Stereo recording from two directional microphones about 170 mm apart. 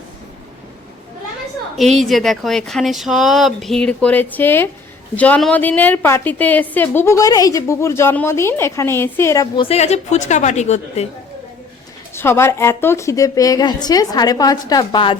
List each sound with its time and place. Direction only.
1.7 s a woman's voice: centre (ahead or behind); by 9.6 s 20° left (ahead or behind)
9.6 s a woman's voice: 40° left (ahead or behind)
12.1 s a woman's voice: 15° left (ahead or behind)